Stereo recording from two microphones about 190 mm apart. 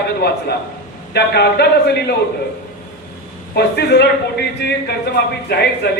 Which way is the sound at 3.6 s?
60° left (ahead or behind).